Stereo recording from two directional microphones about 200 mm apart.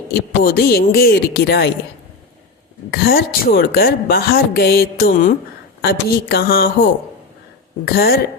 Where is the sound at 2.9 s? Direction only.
50° left (ahead or behind).